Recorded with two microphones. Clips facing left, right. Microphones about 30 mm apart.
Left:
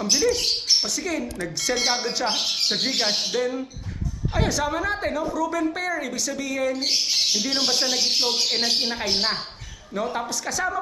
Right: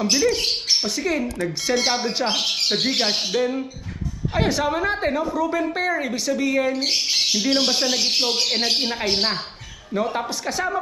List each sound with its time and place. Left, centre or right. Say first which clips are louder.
0.0 s speech: right 2 dB; right
1.4 s a woman's voice: right 3 dB; centre
2.1 s speech: right 2 dB; right
2.4 s speech: right 2 dB; right
2.6 s speech: right 2 dB; right
6.7 s speech: right 2 dB; right
7.4 s a woman's voice: right 3 dB; centre